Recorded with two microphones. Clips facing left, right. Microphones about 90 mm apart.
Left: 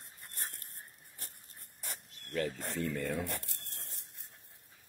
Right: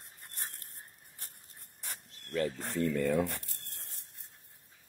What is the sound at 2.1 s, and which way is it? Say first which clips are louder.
Speech: right 3 dB; 30° right (ahead or behind).